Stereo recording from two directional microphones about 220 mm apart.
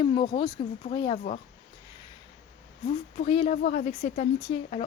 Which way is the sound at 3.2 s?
25° left (ahead or behind).